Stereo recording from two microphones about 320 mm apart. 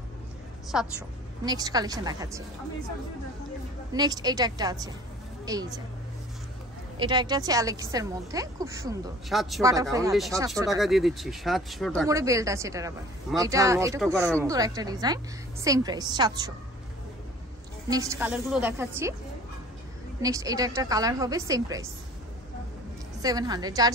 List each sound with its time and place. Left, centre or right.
0.7 s a woman's voice: centre
3.9 s a woman's voice: centre
7.0 s a woman's voice: centre
12.1 s a woman's voice: centre
17.8 s a woman's voice: centre
20.2 s a woman's voice: centre
23.2 s a woman's voice: centre